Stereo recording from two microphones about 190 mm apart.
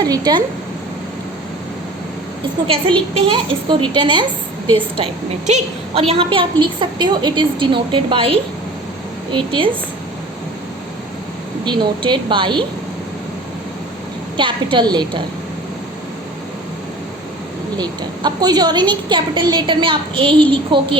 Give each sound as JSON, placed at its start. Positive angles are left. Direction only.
{"t": 0.0, "sound": "a woman's voice", "side_deg": -20}
{"t": 3.3, "sound": "a woman's voice", "side_deg": -25}
{"t": 5.5, "sound": "a woman's voice", "side_deg": -35}
{"t": 11.6, "sound": "a woman's voice", "side_deg": -25}
{"t": 14.3, "sound": "a woman's voice", "side_deg": -25}
{"t": 17.7, "sound": "a woman's voice", "side_deg": -20}